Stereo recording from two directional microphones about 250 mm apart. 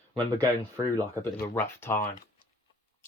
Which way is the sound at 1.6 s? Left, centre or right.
Centre.